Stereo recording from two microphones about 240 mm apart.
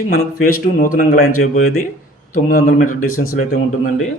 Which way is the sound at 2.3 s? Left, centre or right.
Left.